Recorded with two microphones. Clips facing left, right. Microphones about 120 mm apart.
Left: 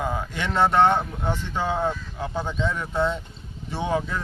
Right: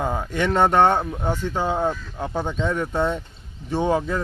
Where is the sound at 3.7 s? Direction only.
40° right (ahead or behind).